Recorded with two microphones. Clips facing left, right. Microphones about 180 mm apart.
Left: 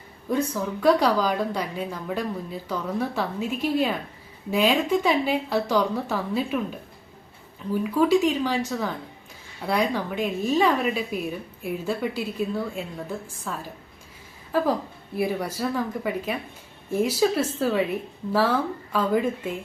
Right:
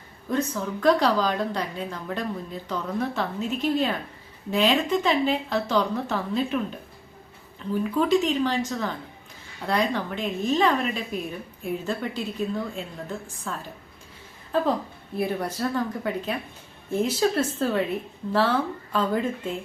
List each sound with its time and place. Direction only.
0.3 s a woman's voice: 10° left (ahead or behind)
7.7 s a woman's voice: 10° left (ahead or behind)
15.1 s a woman's voice: 10° left (ahead or behind)